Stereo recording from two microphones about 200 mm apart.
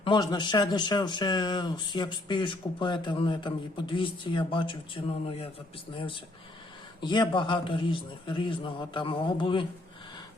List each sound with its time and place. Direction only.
0.0 s speech: 20° left (ahead or behind)
7.0 s speech: 20° left (ahead or behind)